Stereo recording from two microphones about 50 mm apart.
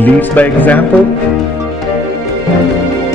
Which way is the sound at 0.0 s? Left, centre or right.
Left.